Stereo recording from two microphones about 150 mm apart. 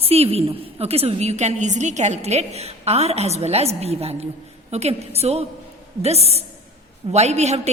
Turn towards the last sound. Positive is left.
turn(degrees=-45)  # may be behind; listen again after turning